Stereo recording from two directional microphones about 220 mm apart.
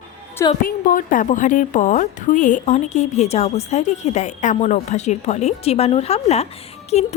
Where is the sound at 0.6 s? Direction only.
40° left (ahead or behind).